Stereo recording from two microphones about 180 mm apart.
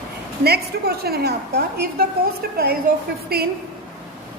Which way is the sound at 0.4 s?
60° right (ahead or behind).